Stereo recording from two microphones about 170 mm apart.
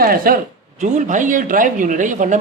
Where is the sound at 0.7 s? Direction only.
45° right (ahead or behind).